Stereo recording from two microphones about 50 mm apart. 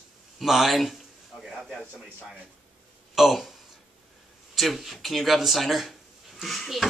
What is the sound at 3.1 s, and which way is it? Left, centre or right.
Speech, centre.